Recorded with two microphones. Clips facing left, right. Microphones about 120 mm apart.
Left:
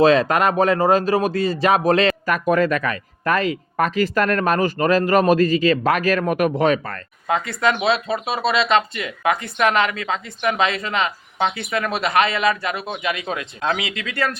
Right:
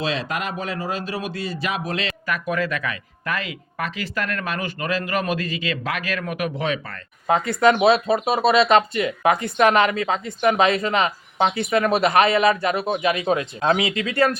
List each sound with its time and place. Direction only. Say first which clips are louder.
0.0 s a man's voice: left 11 dB; 45° left (ahead or behind)
7.8 s speech: right 4 dB; 20° right (ahead or behind)
8.6 s speech: right 2 dB; 35° right (ahead or behind)